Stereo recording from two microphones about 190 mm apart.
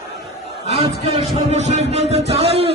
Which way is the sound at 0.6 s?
30° right (ahead or behind).